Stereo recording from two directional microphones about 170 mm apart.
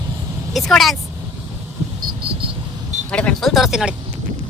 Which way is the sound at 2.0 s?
30° right (ahead or behind).